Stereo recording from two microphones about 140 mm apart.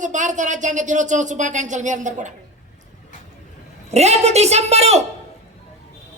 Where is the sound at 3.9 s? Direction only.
50° right (ahead or behind).